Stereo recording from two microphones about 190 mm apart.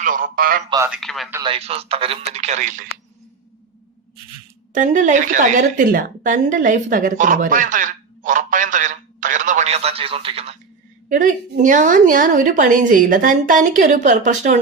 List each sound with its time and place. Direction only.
0.0 s a man's voice: 45° right (ahead or behind)
0.9 s speech: centre (ahead or behind)
1.5 s speech: 30° right (ahead or behind)
4.7 s a woman's voice: 40° right (ahead or behind)
11.1 s a woman's voice: 45° right (ahead or behind)